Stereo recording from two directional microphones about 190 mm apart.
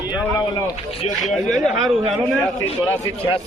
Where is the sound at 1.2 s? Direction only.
Centre (ahead or behind).